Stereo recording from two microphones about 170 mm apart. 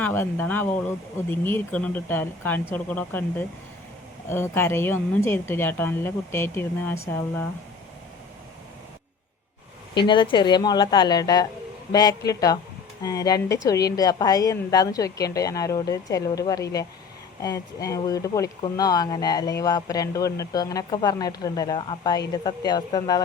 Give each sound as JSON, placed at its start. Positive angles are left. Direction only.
{"t": 0.0, "sound": "a woman's voice", "side_deg": 10}
{"t": 9.9, "sound": "speech", "side_deg": 30}